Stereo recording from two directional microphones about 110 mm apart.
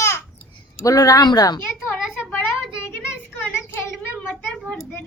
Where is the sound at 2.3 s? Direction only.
20° left (ahead or behind).